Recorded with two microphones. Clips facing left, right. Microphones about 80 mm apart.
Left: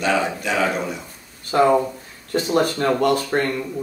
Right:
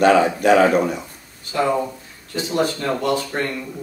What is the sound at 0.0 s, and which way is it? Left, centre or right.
Speech, right.